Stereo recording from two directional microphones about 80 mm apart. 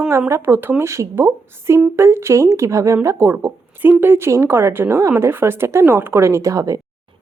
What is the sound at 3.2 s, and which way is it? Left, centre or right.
Speech, right.